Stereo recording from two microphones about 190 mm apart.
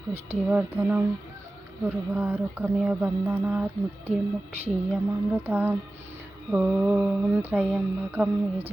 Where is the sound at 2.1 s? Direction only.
10° right (ahead or behind).